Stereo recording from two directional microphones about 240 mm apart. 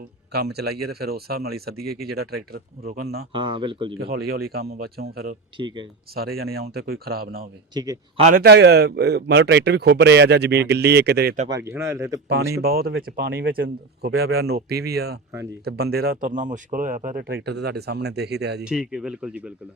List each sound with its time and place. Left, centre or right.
0.3 s speech: right
3.3 s speech: centre
3.9 s speech: right
5.5 s speech: centre
6.1 s speech: right
7.7 s a man's voice: centre
8.2 s speech: right
11.4 s a man's voice: centre
12.6 s speech: right
18.6 s speech: centre